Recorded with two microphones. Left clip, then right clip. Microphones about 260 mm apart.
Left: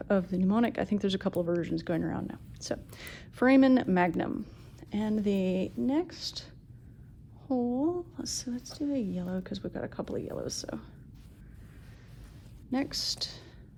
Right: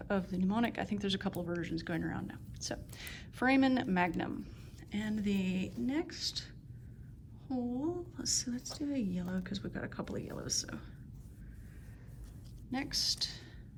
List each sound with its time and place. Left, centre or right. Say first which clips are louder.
0.1 s a woman's voice: left 7 dB; left; by 10.8 s centre
12.7 s speech: left 3 dB; left